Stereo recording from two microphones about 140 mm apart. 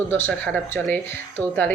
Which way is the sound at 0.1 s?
10° left (ahead or behind).